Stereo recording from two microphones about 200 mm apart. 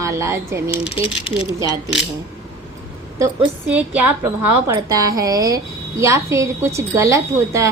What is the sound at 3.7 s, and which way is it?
Speech, 10° right (ahead or behind).